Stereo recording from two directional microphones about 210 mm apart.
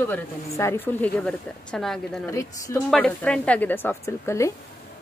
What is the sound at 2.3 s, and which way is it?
Speech, 15° left (ahead or behind).